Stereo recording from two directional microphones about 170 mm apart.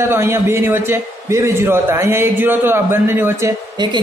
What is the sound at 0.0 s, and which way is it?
A man's voice, 15° right (ahead or behind).